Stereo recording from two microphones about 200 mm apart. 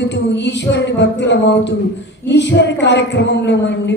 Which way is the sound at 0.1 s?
60° left (ahead or behind).